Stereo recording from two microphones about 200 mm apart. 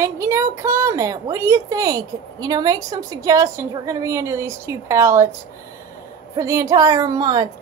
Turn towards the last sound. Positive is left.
turn(degrees=-20)  # may be behind; listen again after turning